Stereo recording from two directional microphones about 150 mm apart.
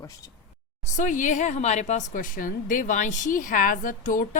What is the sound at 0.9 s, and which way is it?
A woman's voice, 60° left (ahead or behind).